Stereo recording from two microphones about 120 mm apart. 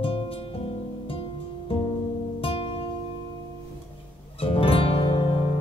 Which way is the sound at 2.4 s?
50° left (ahead or behind).